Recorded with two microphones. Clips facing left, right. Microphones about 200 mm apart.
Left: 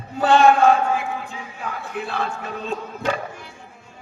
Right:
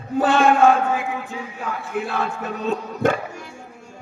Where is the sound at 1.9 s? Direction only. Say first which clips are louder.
Right 2 dB; 50° right (ahead or behind).